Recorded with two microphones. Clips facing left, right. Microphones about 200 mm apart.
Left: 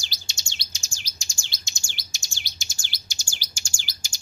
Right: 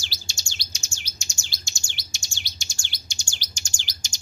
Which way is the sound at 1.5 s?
20° left (ahead or behind).